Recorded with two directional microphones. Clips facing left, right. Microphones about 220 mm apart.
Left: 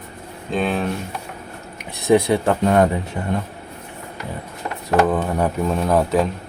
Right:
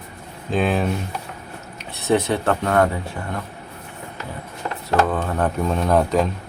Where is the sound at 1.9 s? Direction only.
15° left (ahead or behind).